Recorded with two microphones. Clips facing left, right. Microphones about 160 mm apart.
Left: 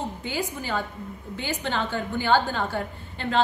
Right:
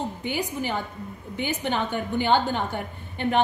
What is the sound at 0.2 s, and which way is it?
A woman's voice, 15° right (ahead or behind).